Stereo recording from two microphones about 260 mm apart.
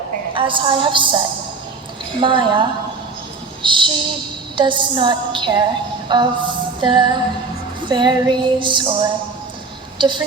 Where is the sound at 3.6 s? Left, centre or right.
Centre.